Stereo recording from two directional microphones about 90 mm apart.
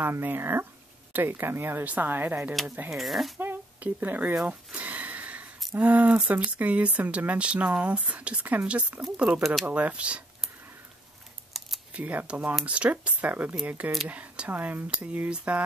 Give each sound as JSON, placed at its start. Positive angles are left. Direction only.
{"t": 0.0, "sound": "speech", "side_deg": -25}
{"t": 2.9, "sound": "speech", "side_deg": 0}
{"t": 3.3, "sound": "speech", "side_deg": -20}
{"t": 4.5, "sound": "a sound", "side_deg": -15}
{"t": 5.8, "sound": "speech", "side_deg": -20}
{"t": 11.9, "sound": "speech", "side_deg": -15}